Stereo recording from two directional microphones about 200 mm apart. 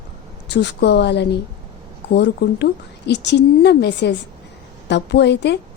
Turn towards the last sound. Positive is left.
turn(degrees=60)  # may be behind; listen again after turning